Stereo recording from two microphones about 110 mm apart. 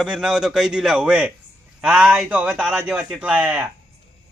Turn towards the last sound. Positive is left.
turn(degrees=-10)  # may be behind; listen again after turning